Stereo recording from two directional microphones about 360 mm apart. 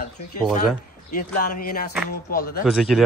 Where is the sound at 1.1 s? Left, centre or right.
Left.